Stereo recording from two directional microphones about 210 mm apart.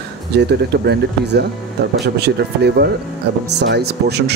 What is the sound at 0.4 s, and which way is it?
Speech, 50° right (ahead or behind).